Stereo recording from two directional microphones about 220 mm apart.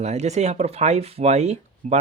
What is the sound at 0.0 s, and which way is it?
Speech, 30° right (ahead or behind).